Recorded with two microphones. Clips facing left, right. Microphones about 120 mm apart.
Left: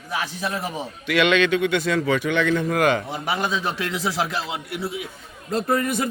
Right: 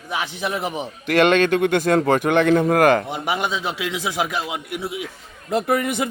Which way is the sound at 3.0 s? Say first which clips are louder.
Right 2 dB; 20° right (ahead or behind).